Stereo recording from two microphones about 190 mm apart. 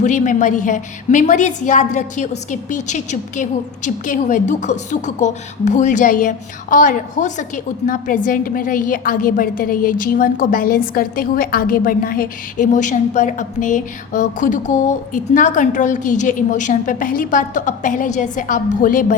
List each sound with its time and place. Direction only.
0.0 s a woman's voice: 40° left (ahead or behind)